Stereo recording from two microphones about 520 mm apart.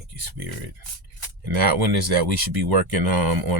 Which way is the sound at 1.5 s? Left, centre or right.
Right.